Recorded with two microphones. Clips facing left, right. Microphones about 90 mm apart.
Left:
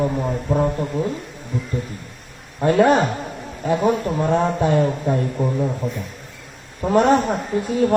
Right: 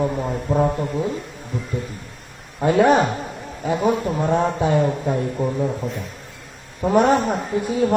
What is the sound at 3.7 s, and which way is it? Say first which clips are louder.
Speech: left 1 dB; 15° left (ahead or behind).